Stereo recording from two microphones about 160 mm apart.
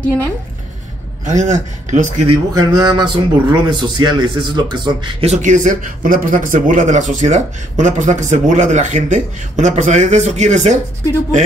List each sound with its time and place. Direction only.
1.2 s a man's voice: 50° right (ahead or behind)
2.2 s a man's voice: 25° right (ahead or behind)
5.2 s a man's voice: 45° right (ahead or behind)